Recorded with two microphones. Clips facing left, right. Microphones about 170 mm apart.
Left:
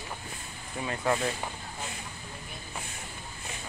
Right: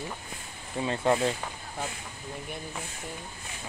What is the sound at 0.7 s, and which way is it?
Speech, 25° right (ahead or behind).